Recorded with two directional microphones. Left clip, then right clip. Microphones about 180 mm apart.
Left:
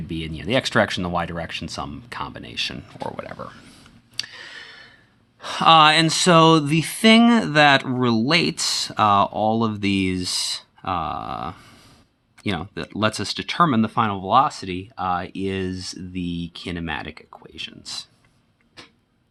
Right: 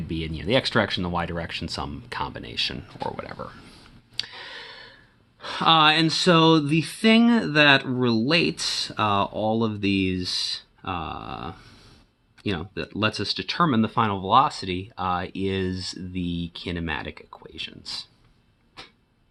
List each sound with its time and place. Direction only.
0.1 s speech: 10° left (ahead or behind)
5.4 s speech: 25° left (ahead or behind)